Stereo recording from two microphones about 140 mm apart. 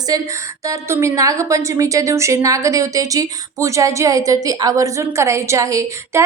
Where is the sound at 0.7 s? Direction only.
20° right (ahead or behind).